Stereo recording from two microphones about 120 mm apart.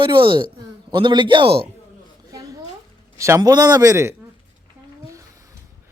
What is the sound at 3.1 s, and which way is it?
A man's voice, 25° right (ahead or behind).